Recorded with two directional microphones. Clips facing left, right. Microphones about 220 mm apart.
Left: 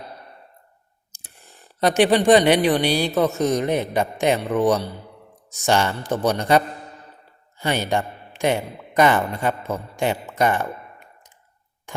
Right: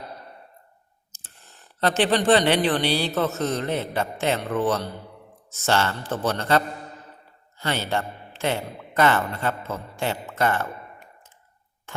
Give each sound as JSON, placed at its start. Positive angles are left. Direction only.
{"t": 1.1, "sound": "speech", "side_deg": 10}
{"t": 7.6, "sound": "speech", "side_deg": 15}
{"t": 11.9, "sound": "tick", "side_deg": 15}